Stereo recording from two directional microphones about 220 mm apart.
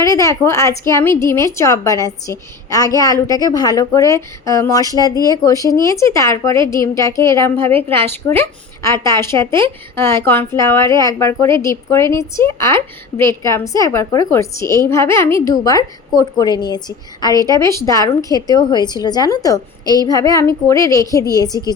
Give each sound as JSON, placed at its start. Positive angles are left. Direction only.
{"t": 0.0, "sound": "a woman's voice", "side_deg": 15}